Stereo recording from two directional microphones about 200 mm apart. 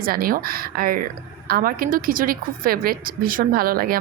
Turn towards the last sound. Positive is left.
turn(degrees=-45)  # may be behind; listen again after turning